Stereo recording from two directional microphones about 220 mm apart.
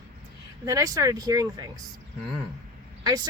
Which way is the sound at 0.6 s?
15° right (ahead or behind).